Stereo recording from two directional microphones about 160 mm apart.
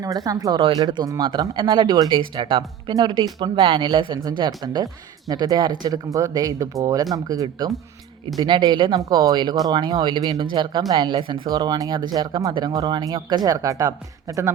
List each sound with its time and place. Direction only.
0.0 s speech: 25° right (ahead or behind)